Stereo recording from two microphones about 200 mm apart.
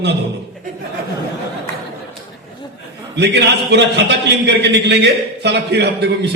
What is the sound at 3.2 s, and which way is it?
A man's voice, 55° right (ahead or behind).